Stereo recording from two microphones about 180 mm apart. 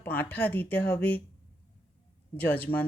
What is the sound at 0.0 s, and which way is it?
Speech, 10° left (ahead or behind).